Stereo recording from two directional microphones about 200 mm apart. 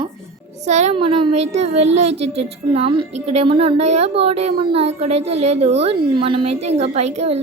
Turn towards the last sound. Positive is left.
turn(degrees=-30)  # may be behind; listen again after turning